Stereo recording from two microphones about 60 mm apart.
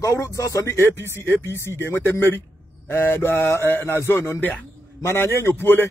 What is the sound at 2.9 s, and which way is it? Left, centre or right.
Mantra, left.